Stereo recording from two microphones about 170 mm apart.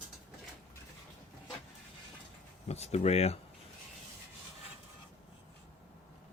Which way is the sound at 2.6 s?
40° left (ahead or behind).